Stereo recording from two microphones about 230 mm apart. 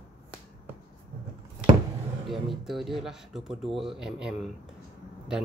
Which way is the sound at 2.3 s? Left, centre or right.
Centre.